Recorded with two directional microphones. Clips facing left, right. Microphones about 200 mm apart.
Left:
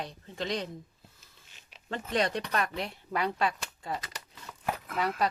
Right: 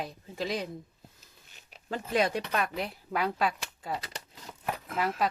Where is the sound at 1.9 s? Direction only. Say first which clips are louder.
Right 2 dB; 5° right (ahead or behind).